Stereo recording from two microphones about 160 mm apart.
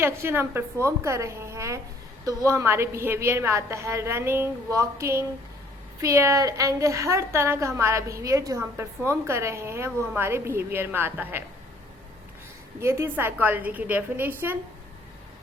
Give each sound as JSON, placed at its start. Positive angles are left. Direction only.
{"t": 0.0, "sound": "a woman's voice", "side_deg": -15}
{"t": 12.8, "sound": "a woman's voice", "side_deg": -15}